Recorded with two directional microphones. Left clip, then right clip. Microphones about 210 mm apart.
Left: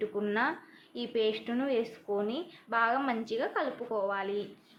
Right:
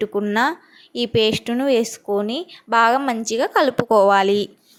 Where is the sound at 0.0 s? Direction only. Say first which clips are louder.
Right 11 dB; 40° right (ahead or behind).